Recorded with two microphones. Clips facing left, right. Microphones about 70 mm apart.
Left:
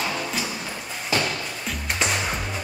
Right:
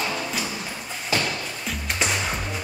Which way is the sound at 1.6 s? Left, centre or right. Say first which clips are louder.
Even; centre.